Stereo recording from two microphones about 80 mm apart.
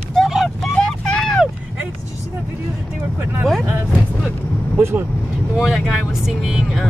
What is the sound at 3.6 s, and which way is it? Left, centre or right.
Vehicle, right.